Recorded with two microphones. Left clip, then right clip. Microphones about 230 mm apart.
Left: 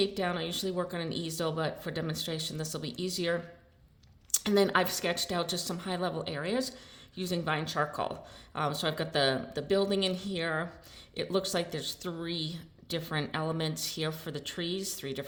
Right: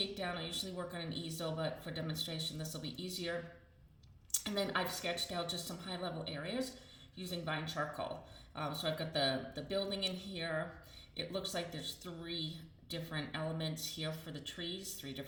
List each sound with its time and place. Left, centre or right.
0.0 s a woman's voice: left